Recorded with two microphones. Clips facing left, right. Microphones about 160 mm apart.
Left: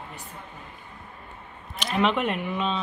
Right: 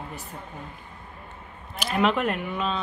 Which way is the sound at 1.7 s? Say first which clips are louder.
Right 1 dB; 5° right (ahead or behind).